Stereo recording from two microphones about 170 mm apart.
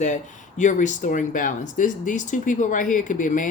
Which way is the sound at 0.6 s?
45° left (ahead or behind).